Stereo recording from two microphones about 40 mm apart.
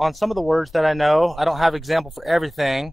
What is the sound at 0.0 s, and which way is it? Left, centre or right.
Speech, centre.